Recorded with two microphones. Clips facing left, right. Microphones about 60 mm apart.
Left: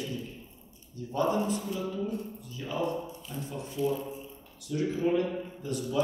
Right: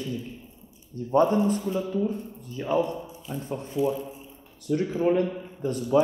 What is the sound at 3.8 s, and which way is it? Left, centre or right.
Speech, centre.